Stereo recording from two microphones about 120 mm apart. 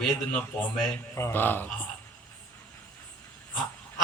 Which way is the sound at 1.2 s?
20° left (ahead or behind).